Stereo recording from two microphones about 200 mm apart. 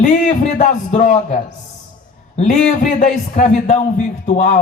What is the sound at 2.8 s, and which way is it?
A man's voice, 40° left (ahead or behind).